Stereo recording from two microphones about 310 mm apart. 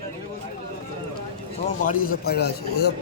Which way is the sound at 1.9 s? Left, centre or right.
Left.